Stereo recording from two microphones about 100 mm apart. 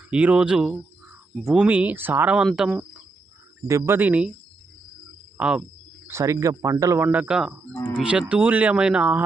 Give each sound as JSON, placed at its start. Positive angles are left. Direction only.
{"t": 0.1, "sound": "speech", "side_deg": -10}
{"t": 3.7, "sound": "speech", "side_deg": -25}
{"t": 5.4, "sound": "cricket", "side_deg": -10}
{"t": 6.1, "sound": "speech", "side_deg": -30}
{"t": 7.1, "sound": "speech", "side_deg": -10}